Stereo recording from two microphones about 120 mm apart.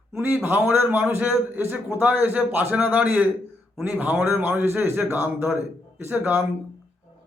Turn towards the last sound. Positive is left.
turn(degrees=-15)  # may be behind; listen again after turning